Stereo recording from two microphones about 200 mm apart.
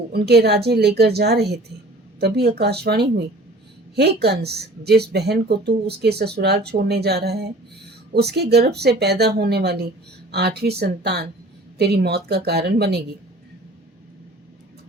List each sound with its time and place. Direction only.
0.1 s speech: 55° right (ahead or behind)